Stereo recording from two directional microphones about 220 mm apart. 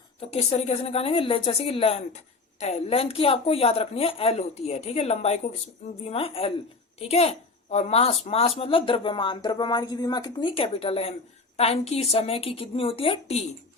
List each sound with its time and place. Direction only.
0.2 s a woman's voice: 25° left (ahead or behind)